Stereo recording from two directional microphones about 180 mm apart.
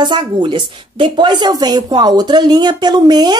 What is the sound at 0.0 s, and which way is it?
A woman's voice, 25° right (ahead or behind).